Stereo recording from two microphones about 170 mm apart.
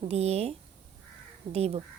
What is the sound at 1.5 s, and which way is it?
Speech, 40° right (ahead or behind).